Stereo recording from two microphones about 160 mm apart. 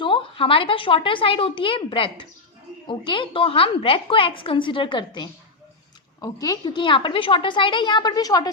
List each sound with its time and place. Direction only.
0.0 s a woman's voice: 30° left (ahead or behind)